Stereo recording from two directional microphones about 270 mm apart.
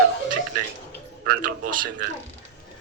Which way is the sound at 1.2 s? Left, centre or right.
Right.